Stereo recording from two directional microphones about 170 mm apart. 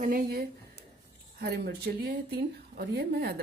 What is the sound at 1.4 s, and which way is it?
Speech, 70° right (ahead or behind).